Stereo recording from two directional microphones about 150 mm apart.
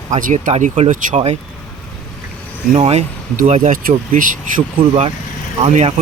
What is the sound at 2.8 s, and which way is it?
Speech, 45° right (ahead or behind).